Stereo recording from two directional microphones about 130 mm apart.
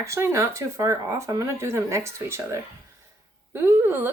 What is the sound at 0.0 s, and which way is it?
A woman's voice, 20° right (ahead or behind).